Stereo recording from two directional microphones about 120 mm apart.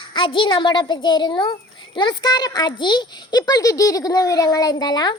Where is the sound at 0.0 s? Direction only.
45° left (ahead or behind).